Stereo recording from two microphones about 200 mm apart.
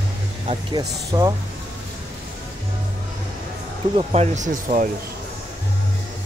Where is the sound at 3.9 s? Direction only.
35° right (ahead or behind).